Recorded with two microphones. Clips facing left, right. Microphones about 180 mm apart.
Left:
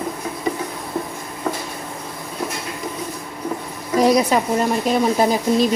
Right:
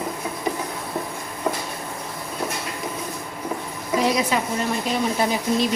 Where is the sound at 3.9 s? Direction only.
40° left (ahead or behind).